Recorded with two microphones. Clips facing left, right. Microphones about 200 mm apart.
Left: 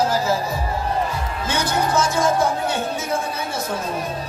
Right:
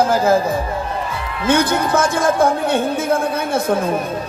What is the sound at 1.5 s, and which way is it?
A woman's voice, 55° right (ahead or behind).